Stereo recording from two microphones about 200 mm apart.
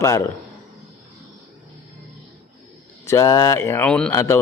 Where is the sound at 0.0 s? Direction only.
15° left (ahead or behind).